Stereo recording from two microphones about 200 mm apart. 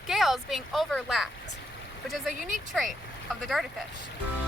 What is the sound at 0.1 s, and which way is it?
Speech, centre (ahead or behind).